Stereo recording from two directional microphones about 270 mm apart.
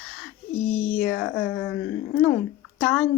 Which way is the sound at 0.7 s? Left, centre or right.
Left.